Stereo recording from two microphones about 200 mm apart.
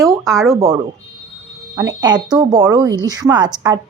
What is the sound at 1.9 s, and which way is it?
A woman's voice, 20° right (ahead or behind).